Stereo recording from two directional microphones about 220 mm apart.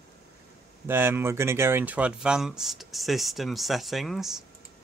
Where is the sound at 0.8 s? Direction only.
10° right (ahead or behind).